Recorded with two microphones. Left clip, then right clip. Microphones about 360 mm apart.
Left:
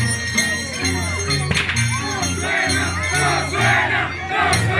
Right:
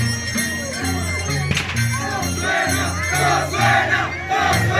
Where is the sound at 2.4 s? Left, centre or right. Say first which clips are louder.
Even; right.